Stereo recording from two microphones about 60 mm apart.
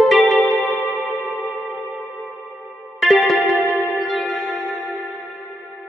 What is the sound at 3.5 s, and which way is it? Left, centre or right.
Music, left.